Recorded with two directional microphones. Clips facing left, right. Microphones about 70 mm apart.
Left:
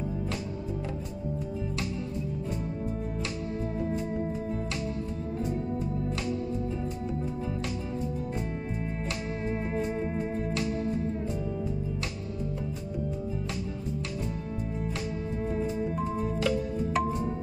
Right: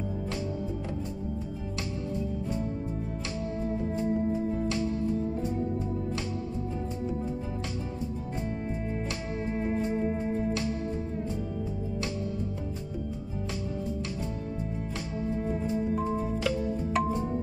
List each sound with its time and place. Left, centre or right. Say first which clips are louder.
9.4 s music: right 4 dB; left
9.9 s music: right 2 dB; left
15.9 s music: right 1 dB; centre